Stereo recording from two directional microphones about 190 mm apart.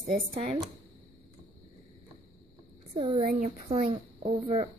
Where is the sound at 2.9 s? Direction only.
30° right (ahead or behind).